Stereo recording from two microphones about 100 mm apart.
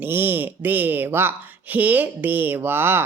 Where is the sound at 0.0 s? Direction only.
20° right (ahead or behind).